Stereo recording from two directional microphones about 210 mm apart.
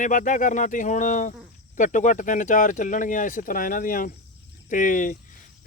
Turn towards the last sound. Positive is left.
turn(degrees=40)  # may be behind; listen again after turning